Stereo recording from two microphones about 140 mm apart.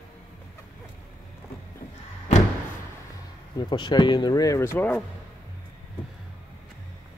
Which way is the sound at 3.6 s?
35° left (ahead or behind).